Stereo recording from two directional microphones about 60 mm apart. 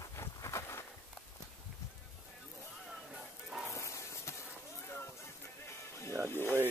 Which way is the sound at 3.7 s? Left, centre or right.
Left.